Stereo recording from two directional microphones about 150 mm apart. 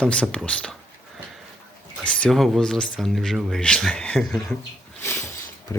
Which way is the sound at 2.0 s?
10° left (ahead or behind).